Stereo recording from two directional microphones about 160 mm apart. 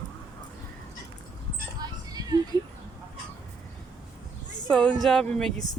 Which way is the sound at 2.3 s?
25° right (ahead or behind).